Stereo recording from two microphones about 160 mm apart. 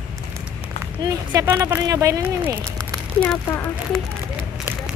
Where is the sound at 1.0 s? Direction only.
20° right (ahead or behind).